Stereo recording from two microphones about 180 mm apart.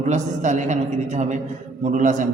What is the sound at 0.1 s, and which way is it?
A man's voice, 40° right (ahead or behind).